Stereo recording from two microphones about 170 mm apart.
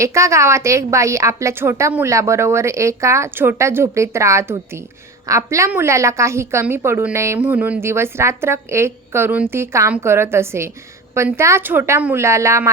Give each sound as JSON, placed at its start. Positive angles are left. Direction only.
{"t": 0.0, "sound": "a woman's voice", "side_deg": -15}